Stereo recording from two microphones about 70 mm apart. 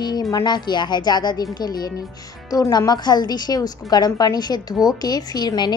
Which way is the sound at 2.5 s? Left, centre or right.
Left.